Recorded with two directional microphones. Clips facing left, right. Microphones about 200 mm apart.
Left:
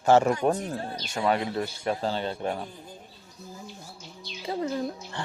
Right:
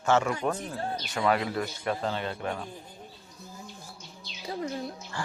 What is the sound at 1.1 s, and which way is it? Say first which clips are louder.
Speech: left 1 dB; 25° left (ahead or behind).